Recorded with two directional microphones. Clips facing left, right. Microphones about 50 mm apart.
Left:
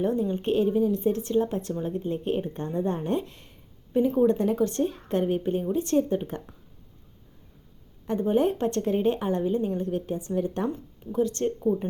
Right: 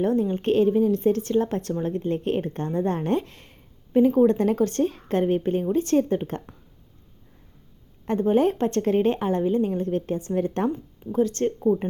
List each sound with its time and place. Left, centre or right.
0.0 s a woman's voice: right
4.3 s a woman's voice: right
8.0 s a woman's voice: right
11.1 s speech: right